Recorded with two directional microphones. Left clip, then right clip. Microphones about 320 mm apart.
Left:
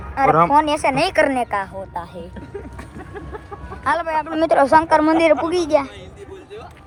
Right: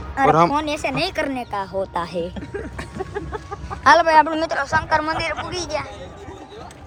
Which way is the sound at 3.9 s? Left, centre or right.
Right.